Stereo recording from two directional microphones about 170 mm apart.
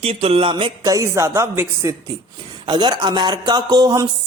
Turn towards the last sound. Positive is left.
turn(degrees=-25)  # may be behind; listen again after turning